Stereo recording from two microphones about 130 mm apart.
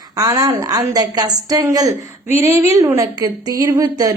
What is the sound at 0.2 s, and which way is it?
Speech, 30° right (ahead or behind).